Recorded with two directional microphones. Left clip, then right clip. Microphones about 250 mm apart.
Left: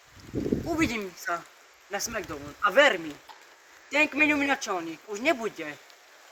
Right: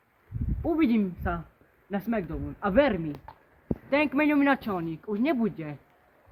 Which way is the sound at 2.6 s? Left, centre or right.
Centre.